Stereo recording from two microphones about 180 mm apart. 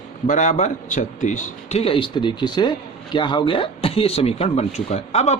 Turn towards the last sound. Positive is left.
turn(degrees=35)  # may be behind; listen again after turning